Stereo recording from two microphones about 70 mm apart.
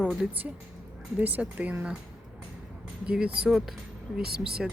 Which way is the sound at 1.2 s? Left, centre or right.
Right.